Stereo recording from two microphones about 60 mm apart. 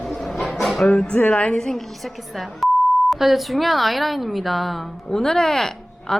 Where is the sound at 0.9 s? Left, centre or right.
Centre.